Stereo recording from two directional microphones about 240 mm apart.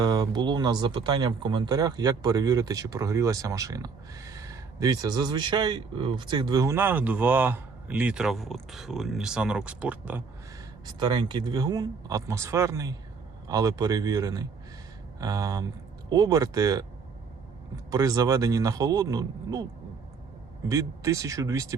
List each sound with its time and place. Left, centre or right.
0.0 s speech: centre
10.8 s speech: centre
17.9 s speech: centre
20.7 s speech: centre